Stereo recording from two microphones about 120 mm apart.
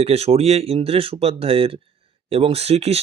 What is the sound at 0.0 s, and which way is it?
Speech, 60° right (ahead or behind).